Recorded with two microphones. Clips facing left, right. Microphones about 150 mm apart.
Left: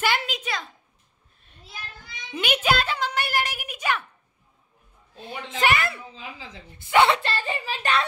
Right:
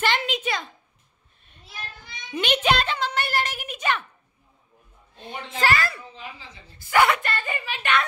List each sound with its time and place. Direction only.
0.0 s a sound: 10° left (ahead or behind)
2.3 s music: 5° left (ahead or behind)
5.6 s a child's voice: 20° left (ahead or behind); by 8.0 s 35° left (ahead or behind)